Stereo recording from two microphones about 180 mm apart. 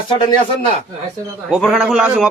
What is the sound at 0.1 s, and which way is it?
Speech, 25° left (ahead or behind).